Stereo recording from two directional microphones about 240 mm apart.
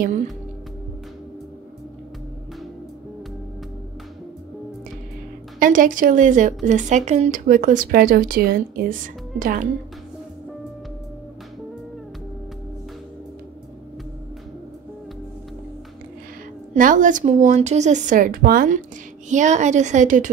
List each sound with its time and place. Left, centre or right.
5.6 s a woman's voice: right
16.7 s a woman's voice: right